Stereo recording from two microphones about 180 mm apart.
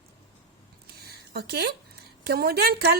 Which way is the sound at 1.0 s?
60° right (ahead or behind).